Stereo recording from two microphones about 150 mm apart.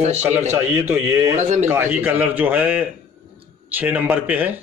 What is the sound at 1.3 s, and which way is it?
Speech, 55° right (ahead or behind).